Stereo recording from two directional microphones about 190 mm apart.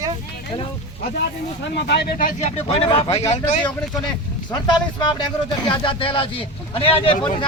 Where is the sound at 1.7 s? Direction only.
60° left (ahead or behind).